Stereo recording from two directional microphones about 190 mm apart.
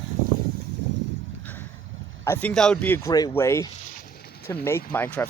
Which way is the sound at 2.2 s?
10° left (ahead or behind).